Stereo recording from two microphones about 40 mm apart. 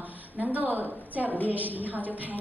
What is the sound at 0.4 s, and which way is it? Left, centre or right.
A woman's voice, right.